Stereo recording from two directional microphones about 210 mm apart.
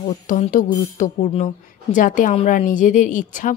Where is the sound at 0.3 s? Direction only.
40° left (ahead or behind).